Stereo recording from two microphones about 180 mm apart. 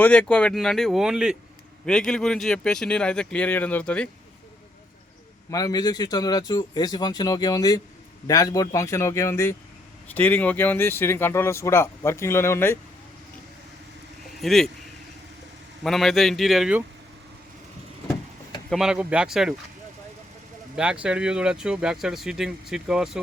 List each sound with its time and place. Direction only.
0.0 s speech: 5° left (ahead or behind)
5.5 s speech: 20° left (ahead or behind)
14.4 s speech: centre (ahead or behind)
15.8 s speech: centre (ahead or behind)
18.7 s speech: 5° right (ahead or behind)
20.7 s speech: 5° right (ahead or behind)